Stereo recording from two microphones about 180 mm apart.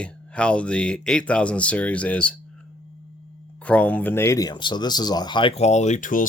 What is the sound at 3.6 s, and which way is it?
Speech, 5° left (ahead or behind).